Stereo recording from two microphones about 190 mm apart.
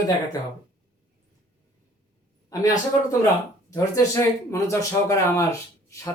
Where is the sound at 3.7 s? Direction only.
15° left (ahead or behind).